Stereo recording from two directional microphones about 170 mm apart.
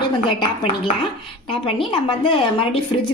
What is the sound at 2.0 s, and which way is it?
Speech, 30° left (ahead or behind).